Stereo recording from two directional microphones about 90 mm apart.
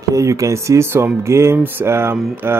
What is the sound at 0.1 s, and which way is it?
Speech, 35° right (ahead or behind).